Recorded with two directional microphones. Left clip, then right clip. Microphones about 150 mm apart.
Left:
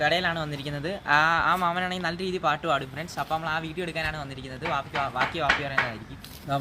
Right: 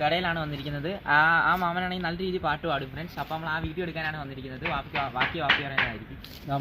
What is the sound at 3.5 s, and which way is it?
Speech, 65° left (ahead or behind).